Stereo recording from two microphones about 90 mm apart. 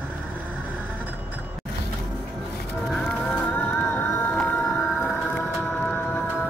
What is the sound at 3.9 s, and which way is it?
Music, 15° left (ahead or behind).